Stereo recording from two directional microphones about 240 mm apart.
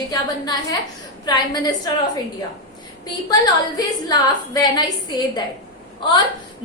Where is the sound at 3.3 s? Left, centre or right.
Centre.